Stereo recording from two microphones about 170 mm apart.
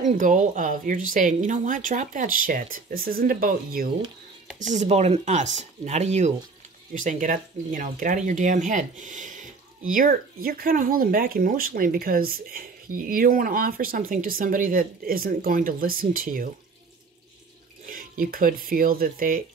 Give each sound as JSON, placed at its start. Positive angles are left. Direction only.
{"t": 0.0, "sound": "a woman's voice", "side_deg": -45}
{"t": 4.6, "sound": "a woman's voice", "side_deg": -45}
{"t": 17.8, "sound": "speech", "side_deg": -55}